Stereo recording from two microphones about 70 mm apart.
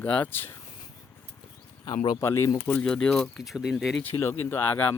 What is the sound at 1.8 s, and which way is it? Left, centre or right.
Speech, left.